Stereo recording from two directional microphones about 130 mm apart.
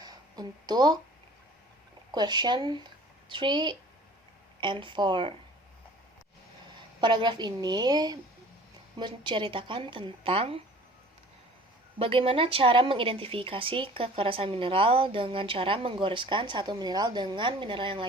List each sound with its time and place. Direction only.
0.0 s a sound: 30° right (ahead or behind)
2.1 s a woman's voice: 35° right (ahead or behind)
7.0 s a woman's voice: 35° right (ahead or behind)
11.9 s a woman's voice: 45° right (ahead or behind)